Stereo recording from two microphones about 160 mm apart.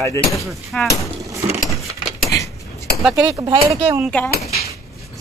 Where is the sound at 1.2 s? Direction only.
20° right (ahead or behind).